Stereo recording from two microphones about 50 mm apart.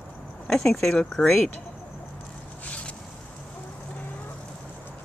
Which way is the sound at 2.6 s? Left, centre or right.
Left.